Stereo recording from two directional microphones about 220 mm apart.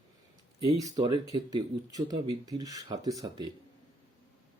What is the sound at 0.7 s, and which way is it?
Speech, 20° right (ahead or behind).